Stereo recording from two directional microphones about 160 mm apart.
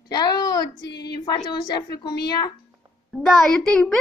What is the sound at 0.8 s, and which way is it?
Speech, 90° left.